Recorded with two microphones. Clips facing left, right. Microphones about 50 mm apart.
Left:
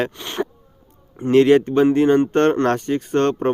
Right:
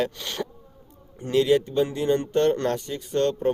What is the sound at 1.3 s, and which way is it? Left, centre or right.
Speech, left.